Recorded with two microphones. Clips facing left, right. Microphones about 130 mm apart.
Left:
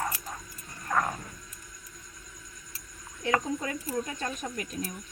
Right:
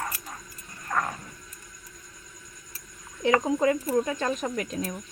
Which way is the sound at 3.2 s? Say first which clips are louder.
Right 7 dB; 90° right.